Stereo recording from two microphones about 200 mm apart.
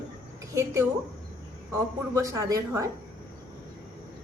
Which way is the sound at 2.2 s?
15° right (ahead or behind).